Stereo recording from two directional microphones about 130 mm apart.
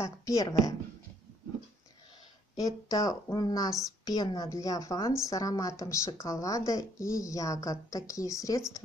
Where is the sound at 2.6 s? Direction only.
25° left (ahead or behind).